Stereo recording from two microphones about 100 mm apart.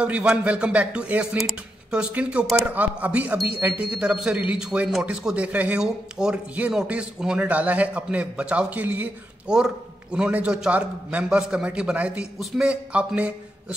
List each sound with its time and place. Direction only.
0.0 s speech: 10° right (ahead or behind)